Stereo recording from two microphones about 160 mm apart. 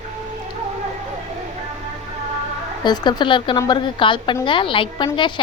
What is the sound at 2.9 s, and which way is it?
A woman's voice, 30° left (ahead or behind).